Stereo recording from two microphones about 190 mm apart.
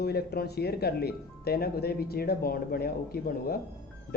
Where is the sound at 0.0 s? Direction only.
55° left (ahead or behind).